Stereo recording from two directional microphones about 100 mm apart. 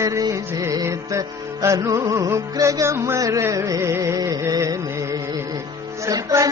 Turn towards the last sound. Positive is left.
turn(degrees=-35)  # may be behind; listen again after turning